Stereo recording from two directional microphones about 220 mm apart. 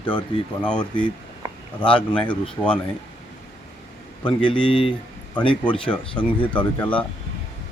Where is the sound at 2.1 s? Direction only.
5° left (ahead or behind).